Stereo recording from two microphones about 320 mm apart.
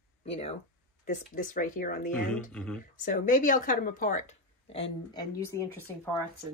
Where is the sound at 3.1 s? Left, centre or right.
Left; by 6.1 s centre.